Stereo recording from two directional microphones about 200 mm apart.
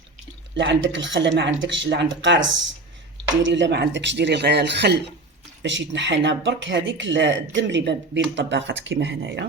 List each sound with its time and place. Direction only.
0.5 s speech: 65° right (ahead or behind)